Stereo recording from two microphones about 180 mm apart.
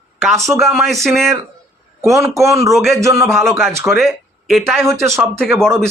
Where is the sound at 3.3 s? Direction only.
Centre (ahead or behind).